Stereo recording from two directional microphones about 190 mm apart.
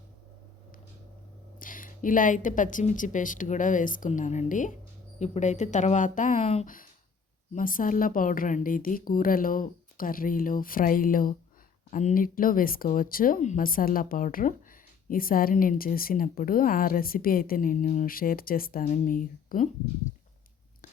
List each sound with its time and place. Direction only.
1.5 s speech: 45° left (ahead or behind)